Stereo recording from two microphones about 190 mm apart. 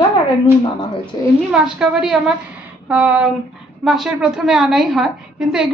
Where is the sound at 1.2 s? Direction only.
20° left (ahead or behind).